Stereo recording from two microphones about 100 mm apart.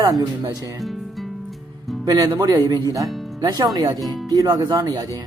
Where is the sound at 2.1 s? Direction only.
40° right (ahead or behind).